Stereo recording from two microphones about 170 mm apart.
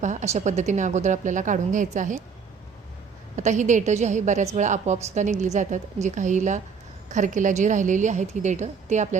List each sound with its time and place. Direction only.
0.0 s a woman's voice: 45° right (ahead or behind)
3.3 s a woman's voice: 45° right (ahead or behind)